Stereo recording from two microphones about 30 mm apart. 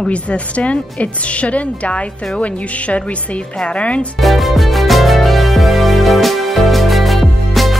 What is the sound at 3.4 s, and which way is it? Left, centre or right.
Speech, left.